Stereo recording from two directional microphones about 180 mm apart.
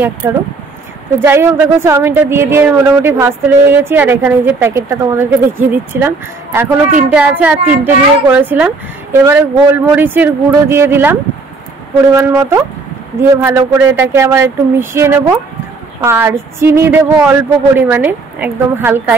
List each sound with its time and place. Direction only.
0.2 s speech: 15° right (ahead or behind)
12.2 s speech: 15° right (ahead or behind)